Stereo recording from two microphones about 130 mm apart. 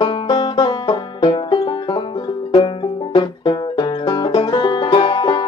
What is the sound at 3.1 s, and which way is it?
Music, 35° left (ahead or behind).